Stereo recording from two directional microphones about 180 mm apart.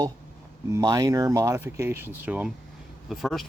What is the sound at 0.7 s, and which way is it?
Speech, 20° right (ahead or behind).